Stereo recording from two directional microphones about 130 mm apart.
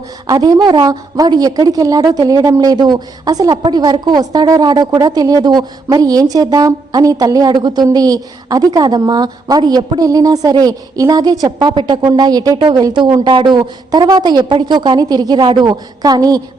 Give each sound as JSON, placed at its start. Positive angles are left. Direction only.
{"t": 0.3, "sound": "a woman's voice", "side_deg": -30}